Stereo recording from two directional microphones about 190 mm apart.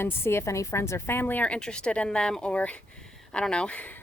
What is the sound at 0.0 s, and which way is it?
A woman's voice, 15° left (ahead or behind).